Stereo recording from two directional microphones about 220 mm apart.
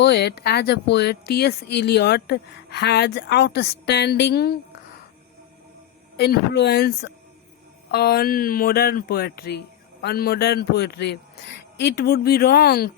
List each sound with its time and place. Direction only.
0.0 s speech: 50° left (ahead or behind)
6.1 s speech: 50° left (ahead or behind)